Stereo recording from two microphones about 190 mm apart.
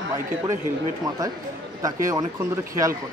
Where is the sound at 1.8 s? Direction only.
20° right (ahead or behind).